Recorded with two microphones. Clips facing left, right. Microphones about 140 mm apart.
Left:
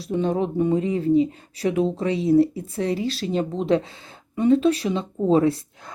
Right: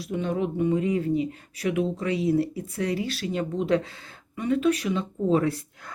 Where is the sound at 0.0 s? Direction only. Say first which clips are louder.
Left 4 dB; 30° left (ahead or behind).